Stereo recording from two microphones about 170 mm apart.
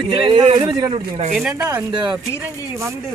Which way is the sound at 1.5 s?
15° right (ahead or behind).